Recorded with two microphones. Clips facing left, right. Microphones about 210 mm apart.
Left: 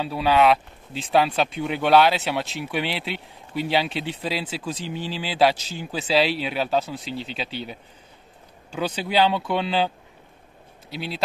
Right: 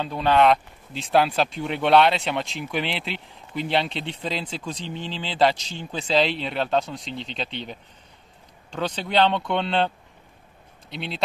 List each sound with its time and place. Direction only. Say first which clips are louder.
0.0 s speech: even; 5° left (ahead or behind)